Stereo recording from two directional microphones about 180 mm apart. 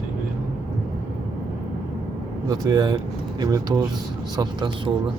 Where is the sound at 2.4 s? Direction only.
20° right (ahead or behind).